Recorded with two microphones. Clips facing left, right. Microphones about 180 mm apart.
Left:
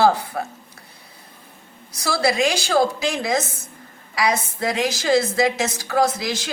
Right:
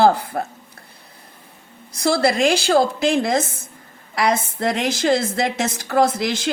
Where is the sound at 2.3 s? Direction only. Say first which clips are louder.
Right 1 dB; 55° right (ahead or behind).